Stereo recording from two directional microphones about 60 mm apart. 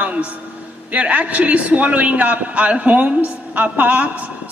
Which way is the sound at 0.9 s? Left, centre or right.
Right.